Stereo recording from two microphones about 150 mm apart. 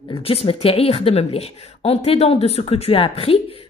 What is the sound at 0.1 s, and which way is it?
Speech, 40° left (ahead or behind).